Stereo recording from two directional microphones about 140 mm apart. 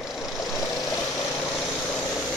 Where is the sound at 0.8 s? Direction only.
25° left (ahead or behind).